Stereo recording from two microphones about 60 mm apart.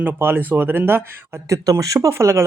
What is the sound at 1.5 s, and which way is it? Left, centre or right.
Speech, right.